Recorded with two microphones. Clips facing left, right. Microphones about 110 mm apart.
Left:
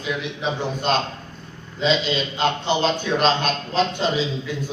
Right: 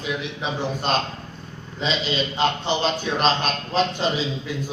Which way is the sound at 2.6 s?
Centre (ahead or behind).